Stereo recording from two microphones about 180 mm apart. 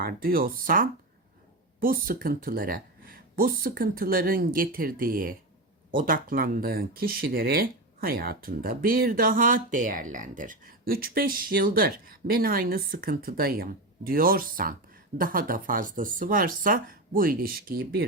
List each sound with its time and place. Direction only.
0.0 s speech: 55° right (ahead or behind)